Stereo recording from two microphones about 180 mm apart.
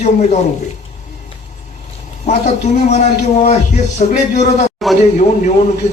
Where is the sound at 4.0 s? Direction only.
45° left (ahead or behind).